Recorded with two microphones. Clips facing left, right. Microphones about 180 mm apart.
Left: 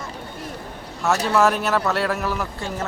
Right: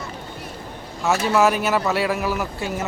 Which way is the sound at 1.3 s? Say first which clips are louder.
Right 1 dB; 5° right (ahead or behind).